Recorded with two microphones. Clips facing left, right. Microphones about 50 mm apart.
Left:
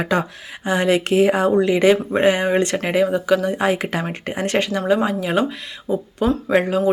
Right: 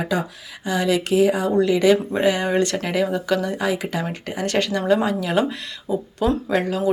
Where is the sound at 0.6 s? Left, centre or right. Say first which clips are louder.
Left 3 dB; left.